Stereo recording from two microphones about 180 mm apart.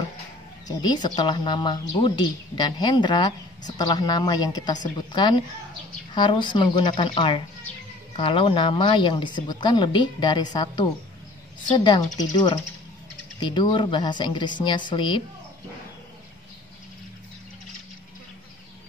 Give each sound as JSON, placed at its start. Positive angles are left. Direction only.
{"t": 0.7, "sound": "speech", "side_deg": 25}
{"t": 13.4, "sound": "speech", "side_deg": 25}